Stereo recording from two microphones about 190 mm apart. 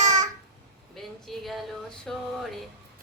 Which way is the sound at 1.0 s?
Centre (ahead or behind).